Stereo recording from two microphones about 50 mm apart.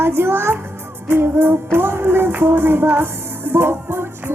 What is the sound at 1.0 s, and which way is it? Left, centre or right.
Music, right.